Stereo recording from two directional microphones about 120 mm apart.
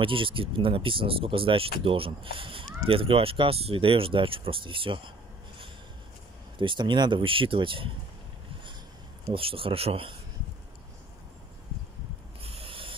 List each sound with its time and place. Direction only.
0.0 s speech: 45° right (ahead or behind)
6.6 s speech: 45° right (ahead or behind)
9.3 s speech: 50° right (ahead or behind)
12.4 s a sound: 50° right (ahead or behind)